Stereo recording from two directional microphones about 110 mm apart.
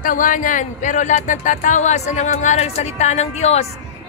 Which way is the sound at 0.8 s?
90° left.